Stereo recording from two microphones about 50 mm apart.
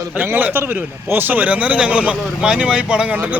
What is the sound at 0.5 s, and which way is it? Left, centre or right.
A man's voice, right.